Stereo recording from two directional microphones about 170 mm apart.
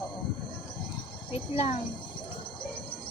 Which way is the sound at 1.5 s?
45° left (ahead or behind).